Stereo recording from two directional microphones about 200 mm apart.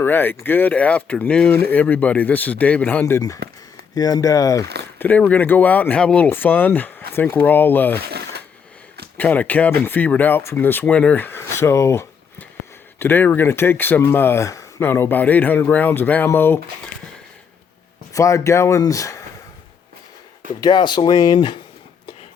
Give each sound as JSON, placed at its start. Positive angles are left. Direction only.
{"t": 0.0, "sound": "speech", "side_deg": 10}
{"t": 8.0, "sound": "a sound", "side_deg": -55}
{"t": 9.1, "sound": "speech", "side_deg": 5}
{"t": 18.1, "sound": "speech", "side_deg": 15}
{"t": 20.6, "sound": "speech", "side_deg": 20}